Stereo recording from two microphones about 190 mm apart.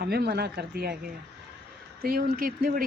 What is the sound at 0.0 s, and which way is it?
Speech, 55° right (ahead or behind).